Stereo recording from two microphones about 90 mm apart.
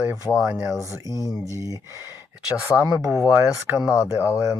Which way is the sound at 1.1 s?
45° left (ahead or behind).